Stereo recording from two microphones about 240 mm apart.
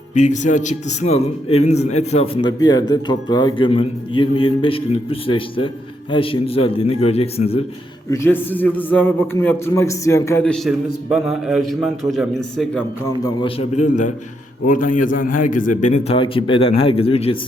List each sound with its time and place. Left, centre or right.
0.1 s a man's voice: left
8.1 s a man's voice: centre
13.2 s a man's voice: left